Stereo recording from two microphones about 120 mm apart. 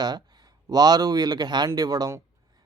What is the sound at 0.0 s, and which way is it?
A man's voice, 35° right (ahead or behind).